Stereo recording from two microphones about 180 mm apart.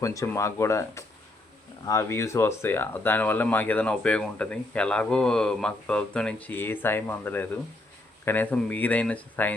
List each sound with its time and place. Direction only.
0.0 s speech: 15° left (ahead or behind)